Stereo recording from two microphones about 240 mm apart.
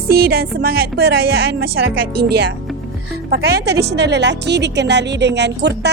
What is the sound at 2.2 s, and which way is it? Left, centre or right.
Speech, right.